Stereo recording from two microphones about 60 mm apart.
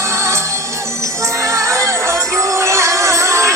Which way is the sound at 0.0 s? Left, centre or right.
Right.